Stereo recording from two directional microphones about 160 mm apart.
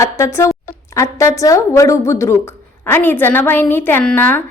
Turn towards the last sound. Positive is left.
turn(degrees=10)  # may be behind; listen again after turning